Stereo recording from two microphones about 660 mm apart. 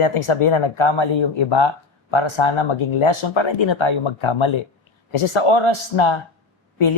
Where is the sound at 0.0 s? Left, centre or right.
Left.